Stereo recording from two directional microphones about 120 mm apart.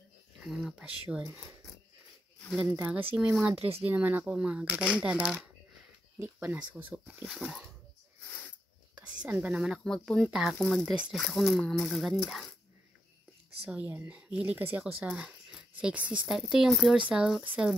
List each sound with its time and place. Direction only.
0.4 s speech: centre (ahead or behind)
2.7 s speech: 15° right (ahead or behind)
3.5 s speech: 55° right (ahead or behind)
3.8 s speech: 15° right (ahead or behind)
6.1 s speech: 20° right (ahead or behind)
6.6 s speech: 10° right (ahead or behind)
8.9 s speech: 10° right (ahead or behind)
13.7 s speech: 15° right (ahead or behind)